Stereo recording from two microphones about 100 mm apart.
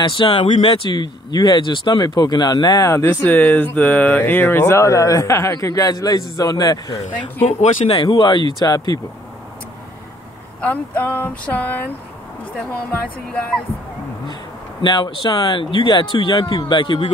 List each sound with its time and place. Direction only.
0.2 s speech: 50° left (ahead or behind)
2.9 s a man's voice: 25° left (ahead or behind); by 6.8 s 40° left (ahead or behind)
7.4 s speech: 80° left; by 9.0 s 40° left (ahead or behind)
10.6 s speech: 15° left (ahead or behind)
13.0 s speech: 10° left (ahead or behind)
14.8 s speech: 50° left (ahead or behind)